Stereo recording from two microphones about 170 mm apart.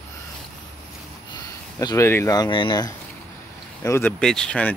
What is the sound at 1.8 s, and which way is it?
Speech, 20° left (ahead or behind).